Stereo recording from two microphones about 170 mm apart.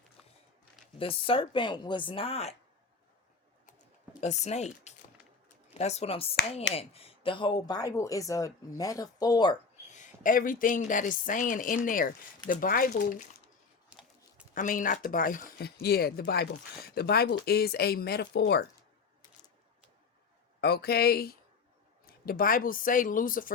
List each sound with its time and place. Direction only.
0.9 s speech: 30° left (ahead or behind)
4.2 s speech: 40° left (ahead or behind); by 9.6 s 25° left (ahead or behind)
9.9 s speech: 50° left (ahead or behind)
13.9 s a sound: 5° right (ahead or behind)
14.5 s speech: 50° left (ahead or behind)
15.5 s speech: 70° left (ahead or behind)
20.6 s speech: 70° left (ahead or behind)